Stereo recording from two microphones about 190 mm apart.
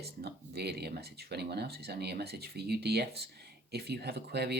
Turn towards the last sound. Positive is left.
turn(degrees=-60)  # may be behind; listen again after turning